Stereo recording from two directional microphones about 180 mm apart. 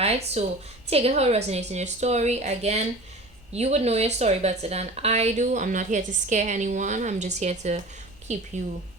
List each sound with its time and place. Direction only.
0.0 s a woman's voice: 35° right (ahead or behind)